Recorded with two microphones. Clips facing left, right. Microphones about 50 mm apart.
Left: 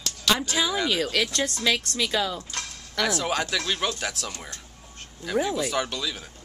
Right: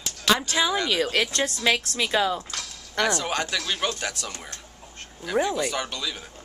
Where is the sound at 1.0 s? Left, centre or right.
Right.